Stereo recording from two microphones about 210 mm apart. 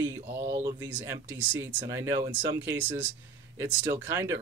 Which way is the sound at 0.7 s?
10° right (ahead or behind).